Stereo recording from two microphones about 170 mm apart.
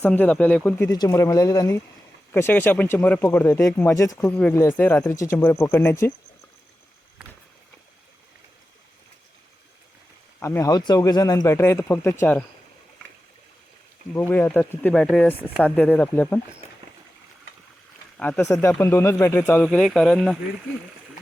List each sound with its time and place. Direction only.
0.0 s speech: 10° left (ahead or behind)
0.9 s speech: 20° left (ahead or behind)
10.4 s speech: 15° left (ahead or behind)
14.1 s speech: 10° left (ahead or behind)
18.2 s speech: 10° left (ahead or behind)